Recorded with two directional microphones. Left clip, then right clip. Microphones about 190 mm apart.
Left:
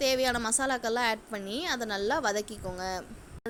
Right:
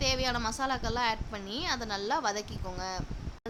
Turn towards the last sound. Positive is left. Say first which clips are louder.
# left 1 dB
turn(degrees=25)  # may be behind; listen again after turning